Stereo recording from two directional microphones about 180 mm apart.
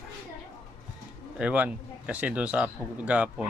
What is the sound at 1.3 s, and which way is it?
Chicken, 5° right (ahead or behind).